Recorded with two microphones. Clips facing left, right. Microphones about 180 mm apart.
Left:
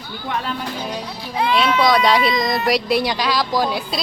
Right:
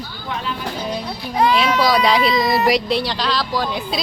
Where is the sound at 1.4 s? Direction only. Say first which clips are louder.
Right 4 dB; 45° right (ahead or behind).